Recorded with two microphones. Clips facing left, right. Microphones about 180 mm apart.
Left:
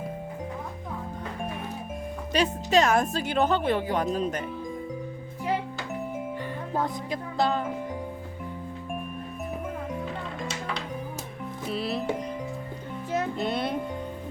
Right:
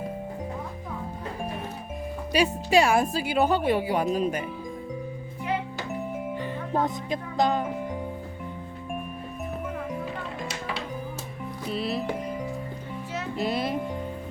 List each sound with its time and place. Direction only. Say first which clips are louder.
2.3 s a woman's voice: right 1 dB; 10° right (ahead or behind)
6.7 s music: right 3 dB; 20° right (ahead or behind)
11.6 s music: right 1 dB; centre (ahead or behind)
13.3 s music: right 1 dB; centre (ahead or behind)